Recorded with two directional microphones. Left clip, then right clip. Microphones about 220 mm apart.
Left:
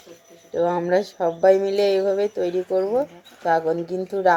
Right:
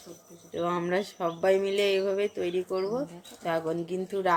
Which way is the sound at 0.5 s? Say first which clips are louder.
Left 8 dB; centre (ahead or behind).